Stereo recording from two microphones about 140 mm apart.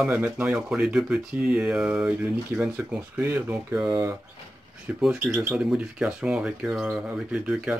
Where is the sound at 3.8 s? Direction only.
30° right (ahead or behind).